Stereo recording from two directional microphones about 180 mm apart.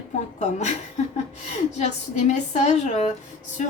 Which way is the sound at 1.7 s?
40° left (ahead or behind).